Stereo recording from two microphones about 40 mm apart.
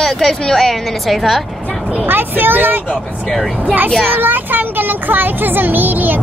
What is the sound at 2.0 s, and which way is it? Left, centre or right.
Speech, right.